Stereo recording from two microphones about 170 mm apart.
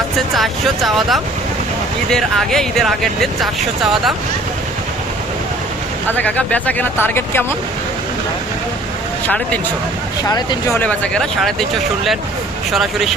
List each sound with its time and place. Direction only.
0.3 s speech: centre (ahead or behind)
6.1 s speech: 10° left (ahead or behind)
10.2 s speech: 20° left (ahead or behind)
10.8 s speech: 5° left (ahead or behind)
12.7 s speech: centre (ahead or behind)